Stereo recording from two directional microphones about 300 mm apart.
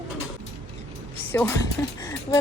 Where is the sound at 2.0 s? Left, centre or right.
Centre.